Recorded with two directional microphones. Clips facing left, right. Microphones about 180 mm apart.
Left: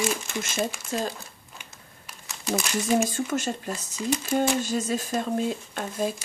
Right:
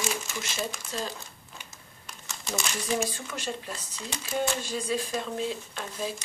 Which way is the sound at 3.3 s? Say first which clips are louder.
Left 7 dB; 45° left (ahead or behind).